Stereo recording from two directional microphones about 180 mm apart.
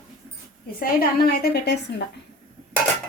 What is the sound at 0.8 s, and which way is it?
A woman's voice, 55° left (ahead or behind).